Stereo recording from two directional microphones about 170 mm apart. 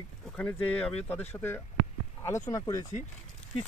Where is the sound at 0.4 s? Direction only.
5° left (ahead or behind).